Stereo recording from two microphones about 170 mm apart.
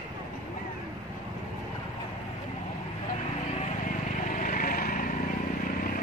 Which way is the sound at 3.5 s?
45° left (ahead or behind).